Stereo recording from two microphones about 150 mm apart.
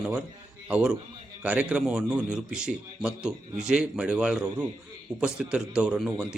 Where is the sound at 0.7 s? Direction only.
5° right (ahead or behind).